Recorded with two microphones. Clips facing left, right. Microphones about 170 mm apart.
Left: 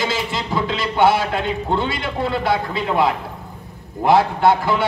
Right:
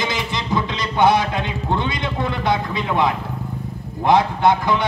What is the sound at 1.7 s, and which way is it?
A man's voice, 20° right (ahead or behind).